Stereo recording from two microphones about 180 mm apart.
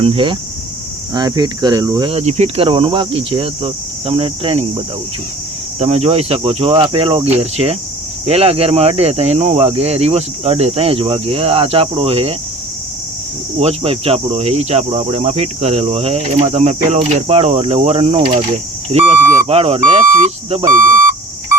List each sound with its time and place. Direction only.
0.0 s speech: 30° right (ahead or behind)
2.0 s speech: 35° right (ahead or behind)
5.8 s speech: 35° right (ahead or behind)
13.6 s speech: 35° right (ahead or behind)
20.7 s speech: 45° right (ahead or behind)